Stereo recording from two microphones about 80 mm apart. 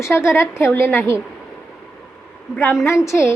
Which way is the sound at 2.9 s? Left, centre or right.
Left.